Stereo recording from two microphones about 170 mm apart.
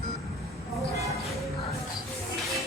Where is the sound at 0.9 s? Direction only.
20° right (ahead or behind).